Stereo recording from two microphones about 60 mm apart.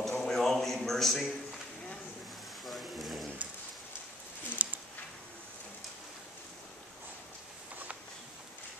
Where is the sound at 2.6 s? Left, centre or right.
Centre.